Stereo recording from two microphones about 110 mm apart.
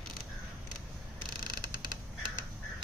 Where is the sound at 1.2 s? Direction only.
40° right (ahead or behind).